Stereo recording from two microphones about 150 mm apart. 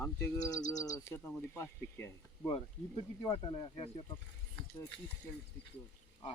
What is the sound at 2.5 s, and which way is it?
Speech, 35° left (ahead or behind).